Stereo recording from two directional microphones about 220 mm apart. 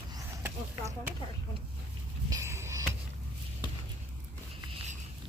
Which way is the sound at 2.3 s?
10° right (ahead or behind).